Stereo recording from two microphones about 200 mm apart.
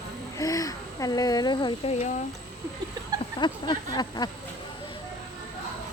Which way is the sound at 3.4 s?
20° left (ahead or behind).